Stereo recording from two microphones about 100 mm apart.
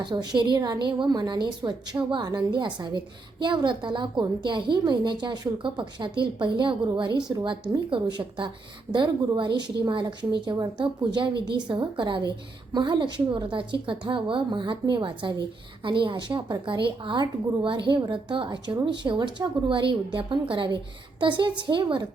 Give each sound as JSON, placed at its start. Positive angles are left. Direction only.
{"t": 0.0, "sound": "a woman's voice", "side_deg": -45}